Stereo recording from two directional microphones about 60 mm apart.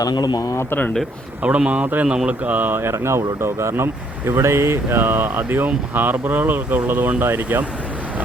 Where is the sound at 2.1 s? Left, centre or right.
Centre.